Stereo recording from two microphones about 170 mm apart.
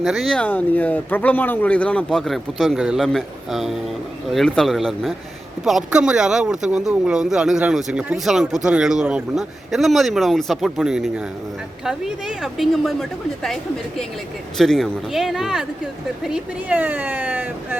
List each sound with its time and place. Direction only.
0.0 s speech: centre (ahead or behind)